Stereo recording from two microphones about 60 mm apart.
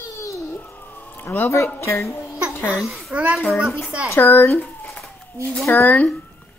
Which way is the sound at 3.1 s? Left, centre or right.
Right.